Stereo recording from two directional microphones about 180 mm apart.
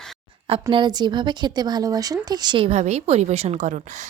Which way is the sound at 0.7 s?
25° right (ahead or behind).